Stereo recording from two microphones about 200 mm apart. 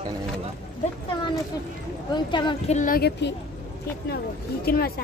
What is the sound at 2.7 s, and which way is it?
Speech, 45° left (ahead or behind).